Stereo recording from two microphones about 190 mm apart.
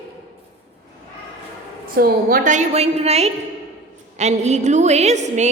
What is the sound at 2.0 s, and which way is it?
A woman's voice, 50° right (ahead or behind).